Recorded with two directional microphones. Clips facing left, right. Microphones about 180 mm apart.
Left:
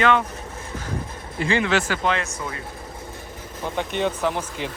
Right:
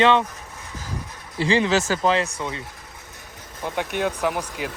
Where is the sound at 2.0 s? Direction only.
30° right (ahead or behind).